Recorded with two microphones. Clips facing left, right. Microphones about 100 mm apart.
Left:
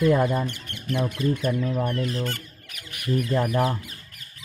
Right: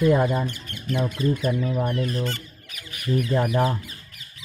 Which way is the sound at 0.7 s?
60° left (ahead or behind).